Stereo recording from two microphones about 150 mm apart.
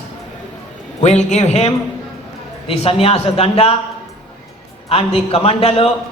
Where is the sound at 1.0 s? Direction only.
50° left (ahead or behind).